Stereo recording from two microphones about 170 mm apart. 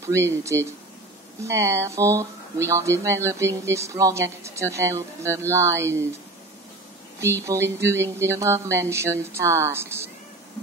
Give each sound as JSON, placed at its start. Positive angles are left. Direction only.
{"t": 0.0, "sound": "speech", "side_deg": -15}
{"t": 7.4, "sound": "speech", "side_deg": -15}